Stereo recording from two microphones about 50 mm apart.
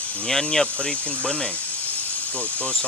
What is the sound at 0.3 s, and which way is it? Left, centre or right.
Speech, centre.